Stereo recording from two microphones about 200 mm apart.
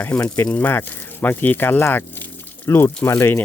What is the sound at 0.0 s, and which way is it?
Speech, 10° left (ahead or behind).